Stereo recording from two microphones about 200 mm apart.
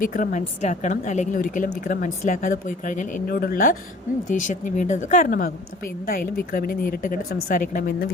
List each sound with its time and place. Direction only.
0.0 s a woman's voice: 40° left (ahead or behind)